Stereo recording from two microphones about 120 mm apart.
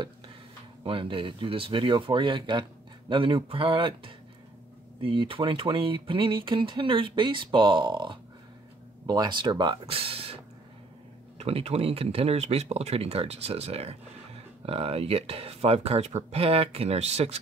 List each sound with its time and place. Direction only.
0.8 s speech: 45° right (ahead or behind); by 17.4 s 60° right (ahead or behind)